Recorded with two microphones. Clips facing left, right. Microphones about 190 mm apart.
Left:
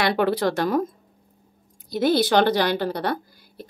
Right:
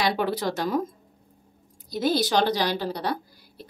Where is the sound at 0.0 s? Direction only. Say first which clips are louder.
Left 4 dB; 60° left (ahead or behind).